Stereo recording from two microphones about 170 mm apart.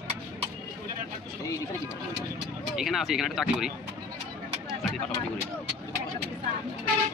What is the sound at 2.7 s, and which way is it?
Speech, centre (ahead or behind).